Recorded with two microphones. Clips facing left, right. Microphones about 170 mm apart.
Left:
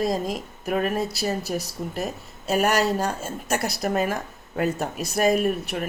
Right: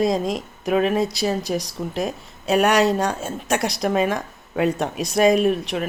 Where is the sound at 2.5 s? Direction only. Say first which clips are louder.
Right 4 dB; 70° right (ahead or behind).